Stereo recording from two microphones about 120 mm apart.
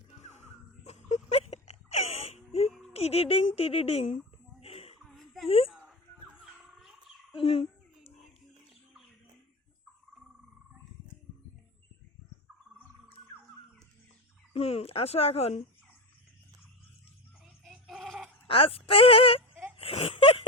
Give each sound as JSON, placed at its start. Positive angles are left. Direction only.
{"t": 0.3, "sound": "wail", "side_deg": 80}
{"t": 2.9, "sound": "speech", "side_deg": 60}
{"t": 4.6, "sound": "a sound", "side_deg": 55}
{"t": 5.1, "sound": "a sound", "side_deg": 0}
{"t": 6.4, "sound": "music", "side_deg": 0}
{"t": 7.3, "sound": "a sound", "side_deg": 50}
{"t": 14.5, "sound": "speech", "side_deg": 55}
{"t": 17.4, "sound": "goat", "side_deg": -5}
{"t": 18.4, "sound": "speech", "side_deg": 50}